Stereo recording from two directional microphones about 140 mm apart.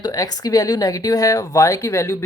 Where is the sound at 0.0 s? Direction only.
25° left (ahead or behind).